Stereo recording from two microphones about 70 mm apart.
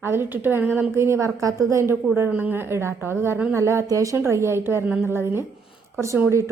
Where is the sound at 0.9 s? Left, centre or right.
Right.